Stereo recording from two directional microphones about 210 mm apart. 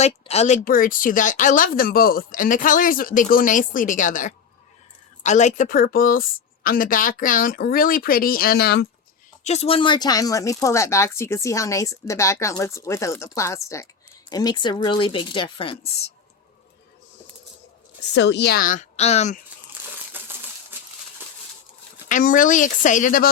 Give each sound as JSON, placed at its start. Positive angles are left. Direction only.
{"t": 0.0, "sound": "a woman's voice", "side_deg": 30}
{"t": 9.4, "sound": "speech", "side_deg": 30}
{"t": 18.1, "sound": "speech", "side_deg": 55}
{"t": 22.1, "sound": "speech", "side_deg": 40}